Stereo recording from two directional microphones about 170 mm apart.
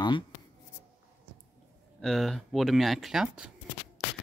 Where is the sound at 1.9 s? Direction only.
Centre (ahead or behind).